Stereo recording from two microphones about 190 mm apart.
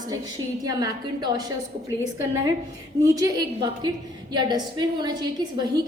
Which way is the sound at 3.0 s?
20° right (ahead or behind).